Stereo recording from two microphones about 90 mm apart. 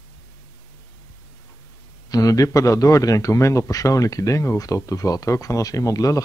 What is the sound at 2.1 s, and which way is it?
Speech, 40° left (ahead or behind).